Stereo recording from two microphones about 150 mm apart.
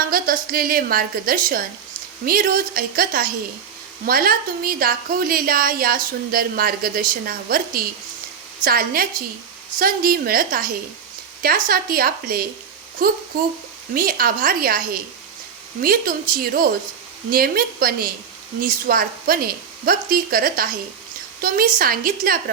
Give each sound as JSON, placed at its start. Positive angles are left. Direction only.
{"t": 0.1, "sound": "a woman's voice", "side_deg": -75}